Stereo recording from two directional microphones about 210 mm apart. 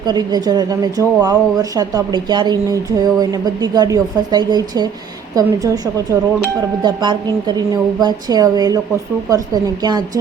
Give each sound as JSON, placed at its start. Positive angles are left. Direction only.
{"t": 0.0, "sound": "speech", "side_deg": -20}